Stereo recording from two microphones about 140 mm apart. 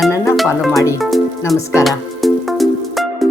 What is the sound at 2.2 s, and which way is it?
Music, centre (ahead or behind).